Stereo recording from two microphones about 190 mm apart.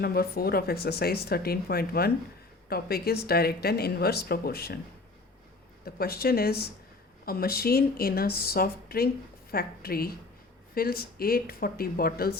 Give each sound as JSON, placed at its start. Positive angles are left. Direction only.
{"t": 0.0, "sound": "speech", "side_deg": 55}
{"t": 5.8, "sound": "speech", "side_deg": 55}